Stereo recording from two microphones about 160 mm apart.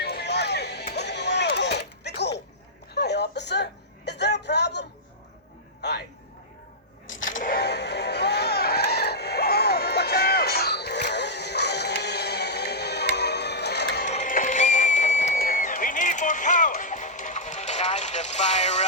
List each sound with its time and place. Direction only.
0.0 s a sound: 85° left
7.3 s music: 65° left (ahead or behind); by 14.0 s 90° left
14.0 s music: 50° left (ahead or behind)